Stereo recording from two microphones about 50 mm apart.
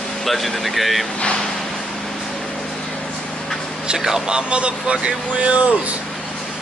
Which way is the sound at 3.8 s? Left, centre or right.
Centre.